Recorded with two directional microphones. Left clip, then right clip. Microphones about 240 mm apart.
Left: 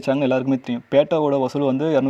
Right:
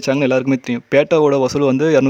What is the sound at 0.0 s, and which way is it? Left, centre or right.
Speech, centre.